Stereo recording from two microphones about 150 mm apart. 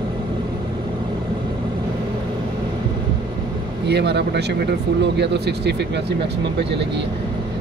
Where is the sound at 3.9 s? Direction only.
90° right.